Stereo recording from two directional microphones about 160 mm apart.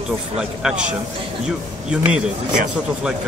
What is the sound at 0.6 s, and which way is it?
Speech, 5° right (ahead or behind).